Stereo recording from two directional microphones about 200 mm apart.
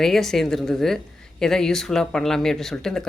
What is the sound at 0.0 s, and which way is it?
Speech, centre (ahead or behind).